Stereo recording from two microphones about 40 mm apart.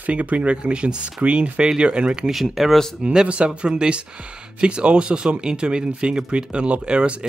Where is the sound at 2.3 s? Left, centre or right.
Centre.